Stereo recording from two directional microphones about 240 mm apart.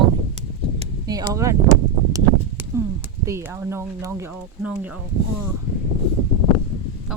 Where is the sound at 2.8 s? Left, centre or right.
Centre.